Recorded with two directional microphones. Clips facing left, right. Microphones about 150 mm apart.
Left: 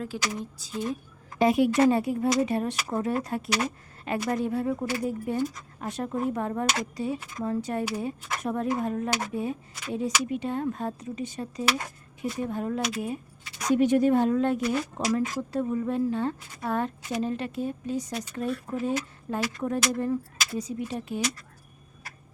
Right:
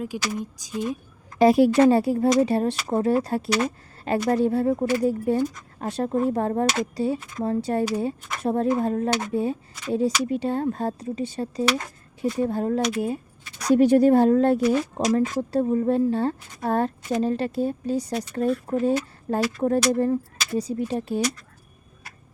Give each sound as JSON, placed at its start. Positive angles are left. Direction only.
{"t": 0.0, "sound": "speech", "side_deg": -15}
{"t": 1.4, "sound": "speech", "side_deg": -35}